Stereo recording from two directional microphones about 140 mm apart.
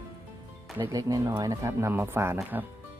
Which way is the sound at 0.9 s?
25° right (ahead or behind).